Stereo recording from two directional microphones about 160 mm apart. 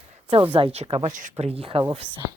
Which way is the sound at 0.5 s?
40° right (ahead or behind).